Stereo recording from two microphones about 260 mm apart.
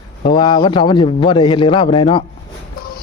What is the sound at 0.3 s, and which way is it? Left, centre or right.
A man's voice, centre.